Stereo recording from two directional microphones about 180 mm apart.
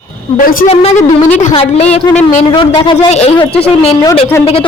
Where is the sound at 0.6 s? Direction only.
35° left (ahead or behind).